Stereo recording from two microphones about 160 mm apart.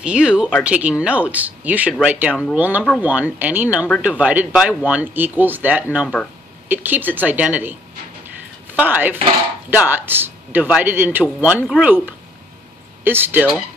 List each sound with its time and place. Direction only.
0.0 s a man's voice: 5° right (ahead or behind)
8.7 s a man's voice: 10° right (ahead or behind)